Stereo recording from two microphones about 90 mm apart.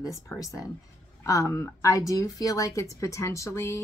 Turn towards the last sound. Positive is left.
turn(degrees=35)  # may be behind; listen again after turning